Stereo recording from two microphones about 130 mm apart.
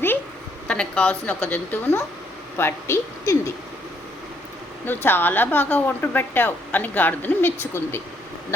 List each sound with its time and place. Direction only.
0.7 s a woman's voice: 10° left (ahead or behind)
4.9 s speech: 15° left (ahead or behind)